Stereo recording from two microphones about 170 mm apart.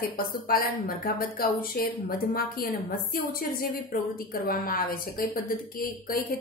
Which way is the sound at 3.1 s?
60° left (ahead or behind).